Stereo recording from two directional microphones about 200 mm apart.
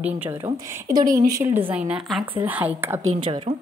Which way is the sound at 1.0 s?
40° right (ahead or behind).